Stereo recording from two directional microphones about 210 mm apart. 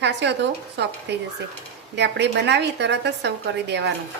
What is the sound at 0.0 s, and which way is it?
A woman's voice, 55° right (ahead or behind).